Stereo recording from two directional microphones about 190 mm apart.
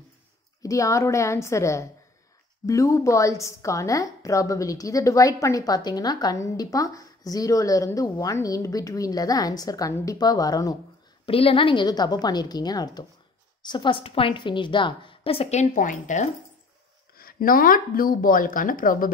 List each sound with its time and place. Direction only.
0.6 s a woman's voice: 15° left (ahead or behind)
11.2 s a woman's voice: 30° left (ahead or behind)
15.7 s a woman's voice: 40° left (ahead or behind)